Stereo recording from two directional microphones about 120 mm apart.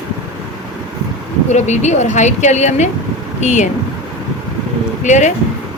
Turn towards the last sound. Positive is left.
turn(degrees=90)